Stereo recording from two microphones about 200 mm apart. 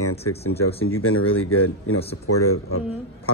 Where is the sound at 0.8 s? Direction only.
90° left.